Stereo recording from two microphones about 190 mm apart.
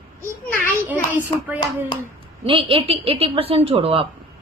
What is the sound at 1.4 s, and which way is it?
Speech, 10° right (ahead or behind).